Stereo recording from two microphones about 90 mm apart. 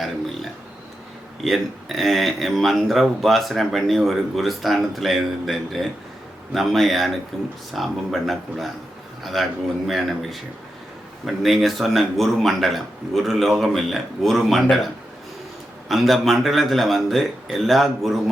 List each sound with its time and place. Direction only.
1.5 s speech: centre (ahead or behind)
15.9 s speech: centre (ahead or behind)